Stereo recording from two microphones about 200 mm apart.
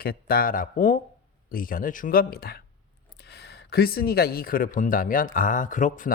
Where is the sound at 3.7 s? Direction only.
50° left (ahead or behind).